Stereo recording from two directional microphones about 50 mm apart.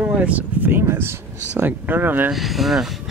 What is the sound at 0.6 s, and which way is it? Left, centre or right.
Speech, right.